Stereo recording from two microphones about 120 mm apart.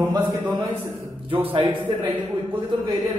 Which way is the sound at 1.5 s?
45° right (ahead or behind).